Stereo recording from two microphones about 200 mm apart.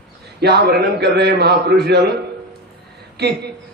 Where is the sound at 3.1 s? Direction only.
55° right (ahead or behind).